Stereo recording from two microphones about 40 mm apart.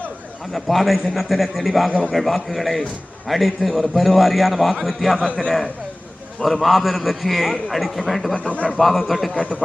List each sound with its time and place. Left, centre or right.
0.5 s a man's voice: centre
6.4 s a man's voice: centre
8.4 s a man's voice: left
8.8 s a man's voice: centre
9.3 s a man's voice: left